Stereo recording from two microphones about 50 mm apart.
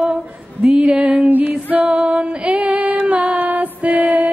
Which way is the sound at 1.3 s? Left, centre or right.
Right.